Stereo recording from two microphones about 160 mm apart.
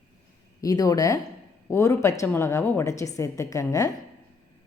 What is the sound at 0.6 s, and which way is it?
A woman's voice, 20° left (ahead or behind).